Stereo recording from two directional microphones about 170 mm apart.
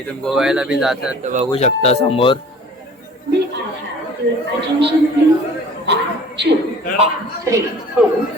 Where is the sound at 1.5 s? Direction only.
40° left (ahead or behind).